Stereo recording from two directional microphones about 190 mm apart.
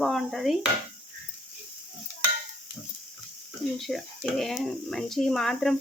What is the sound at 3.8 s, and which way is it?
Speech, centre (ahead or behind).